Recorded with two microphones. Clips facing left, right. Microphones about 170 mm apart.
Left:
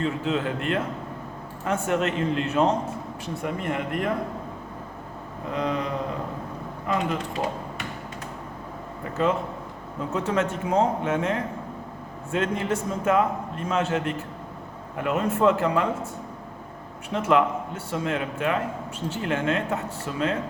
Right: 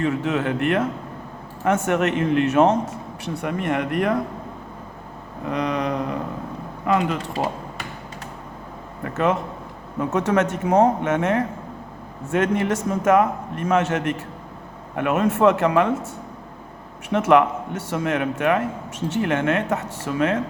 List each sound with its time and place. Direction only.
0.0 s a man's voice: 75° right (ahead or behind)
5.5 s a man's voice: 70° right (ahead or behind)
9.1 s a man's voice: 75° right (ahead or behind)
17.1 s a man's voice: 70° right (ahead or behind)